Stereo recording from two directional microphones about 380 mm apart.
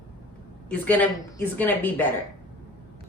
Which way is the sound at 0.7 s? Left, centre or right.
Centre.